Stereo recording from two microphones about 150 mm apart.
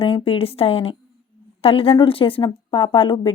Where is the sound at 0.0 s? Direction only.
40° left (ahead or behind).